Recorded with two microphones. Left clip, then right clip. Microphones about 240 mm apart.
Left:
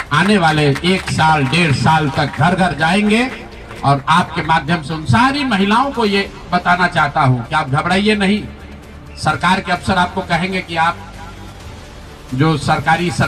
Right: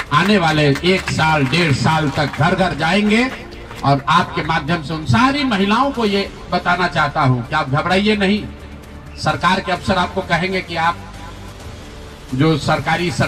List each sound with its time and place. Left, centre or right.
0.1 s speech: left
12.4 s speech: left